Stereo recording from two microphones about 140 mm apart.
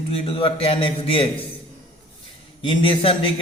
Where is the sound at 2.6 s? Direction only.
35° left (ahead or behind).